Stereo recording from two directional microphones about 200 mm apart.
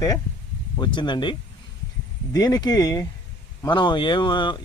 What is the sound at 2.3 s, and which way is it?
Speech, 20° left (ahead or behind).